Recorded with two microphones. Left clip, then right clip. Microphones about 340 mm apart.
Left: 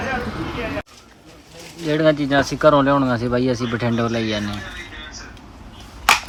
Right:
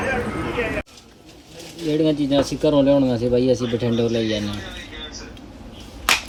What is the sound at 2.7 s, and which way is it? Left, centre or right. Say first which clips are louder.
Speech: left 1 dB; centre.